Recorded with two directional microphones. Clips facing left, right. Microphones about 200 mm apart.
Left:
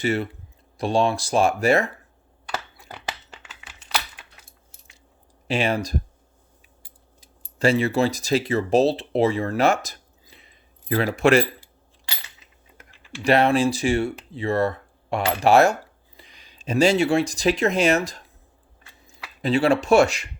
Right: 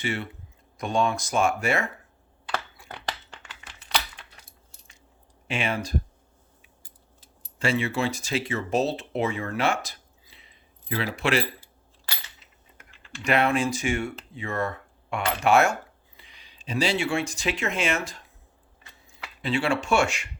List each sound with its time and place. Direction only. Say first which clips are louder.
0.0 s speech: left 7 dB; 40° left (ahead or behind)
3.1 s coin: even; 5° left (ahead or behind)
5.5 s speech: left 6 dB; 35° left (ahead or behind)
7.6 s speech: left 6 dB; 40° left (ahead or behind)
13.2 s speech: left 5 dB; 35° left (ahead or behind)